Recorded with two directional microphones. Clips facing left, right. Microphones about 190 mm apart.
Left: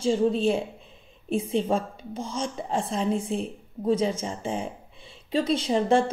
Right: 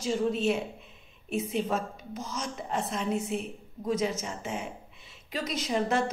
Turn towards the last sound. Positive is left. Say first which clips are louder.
# left 6 dB
turn(degrees=30)  # may be behind; listen again after turning